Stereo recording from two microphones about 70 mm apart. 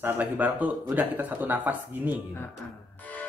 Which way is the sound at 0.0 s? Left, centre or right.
Right.